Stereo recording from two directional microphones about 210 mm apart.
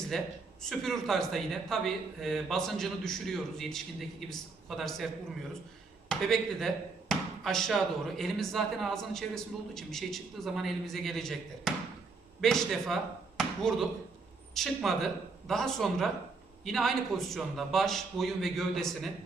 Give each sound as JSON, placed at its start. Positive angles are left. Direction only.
{"t": 0.1, "sound": "speech", "side_deg": 0}
{"t": 6.1, "sound": "speech", "side_deg": 0}